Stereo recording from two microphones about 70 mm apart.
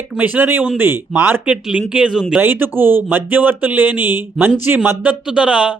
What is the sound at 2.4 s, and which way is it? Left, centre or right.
Speech, right.